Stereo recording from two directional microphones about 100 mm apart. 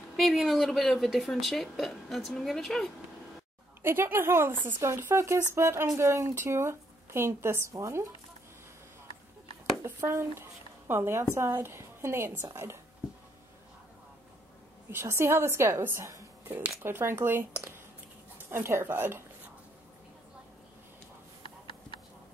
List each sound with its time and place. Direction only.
0.1 s speech: centre (ahead or behind)
3.8 s speech: 25° right (ahead or behind)
9.8 s speech: 25° right (ahead or behind)
14.9 s speech: 25° right (ahead or behind)